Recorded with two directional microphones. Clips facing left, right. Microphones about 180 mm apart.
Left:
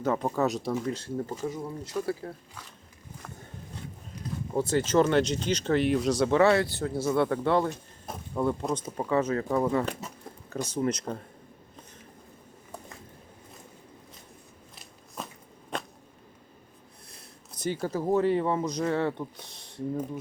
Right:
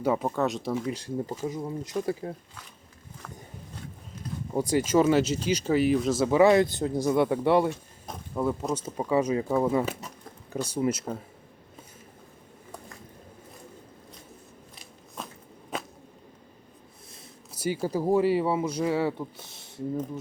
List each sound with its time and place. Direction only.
0.0 s speech: 10° right (ahead or behind)
0.3 s speech: centre (ahead or behind)
0.9 s speech: 15° right (ahead or behind)
4.5 s speech: 10° right (ahead or behind)
8.0 s a sound: 5° left (ahead or behind)
8.4 s speech: 5° right (ahead or behind)
14.8 s biting: centre (ahead or behind)
15.7 s whip: 5° right (ahead or behind)
17.1 s speech: 5° right (ahead or behind)